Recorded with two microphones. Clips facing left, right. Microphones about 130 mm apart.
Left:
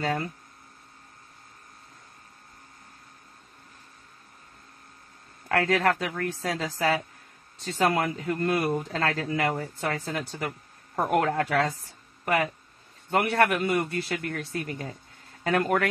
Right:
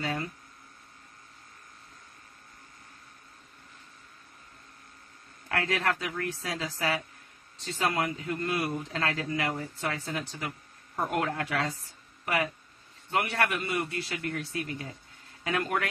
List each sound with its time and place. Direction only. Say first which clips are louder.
0.0 s hum: left 4 dB; 40° left (ahead or behind)
5.5 s speech: left 6 dB; 50° left (ahead or behind)
7.6 s speech: left 5 dB; 45° left (ahead or behind)
13.1 s speech: left 5 dB; 45° left (ahead or behind)